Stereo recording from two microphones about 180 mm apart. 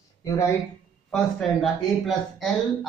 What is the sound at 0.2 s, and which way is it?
Speech, 15° left (ahead or behind).